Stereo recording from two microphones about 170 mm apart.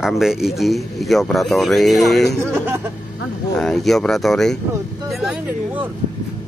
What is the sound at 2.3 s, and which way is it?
Speech, 15° right (ahead or behind).